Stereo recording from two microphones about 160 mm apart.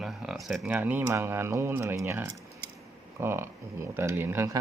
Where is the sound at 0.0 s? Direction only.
Centre (ahead or behind).